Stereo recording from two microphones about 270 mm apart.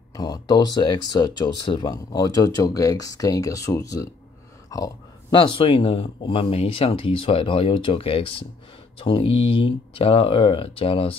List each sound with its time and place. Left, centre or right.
0.1 s speech: centre